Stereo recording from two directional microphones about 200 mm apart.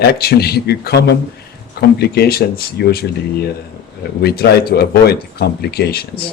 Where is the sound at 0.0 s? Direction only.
50° left (ahead or behind).